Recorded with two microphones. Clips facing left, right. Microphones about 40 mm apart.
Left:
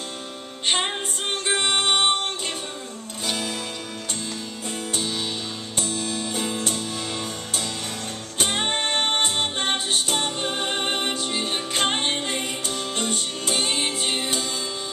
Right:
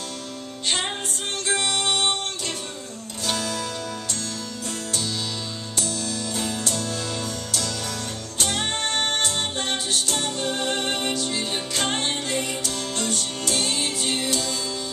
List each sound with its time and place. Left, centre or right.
0.8 s music: left
3.3 s music: left
4.6 s music: left